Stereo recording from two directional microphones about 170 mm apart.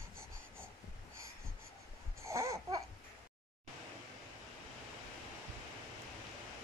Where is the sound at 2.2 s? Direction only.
15° right (ahead or behind).